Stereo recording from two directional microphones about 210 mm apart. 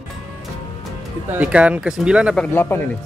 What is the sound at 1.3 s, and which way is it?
Speech, 5° right (ahead or behind).